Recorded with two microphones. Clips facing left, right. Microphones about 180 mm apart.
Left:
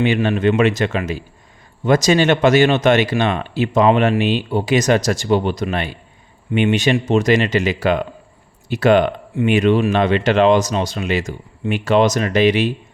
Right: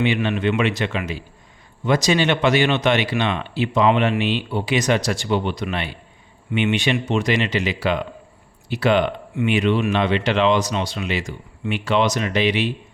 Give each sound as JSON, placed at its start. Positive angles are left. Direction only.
{"t": 0.0, "sound": "speech", "side_deg": 45}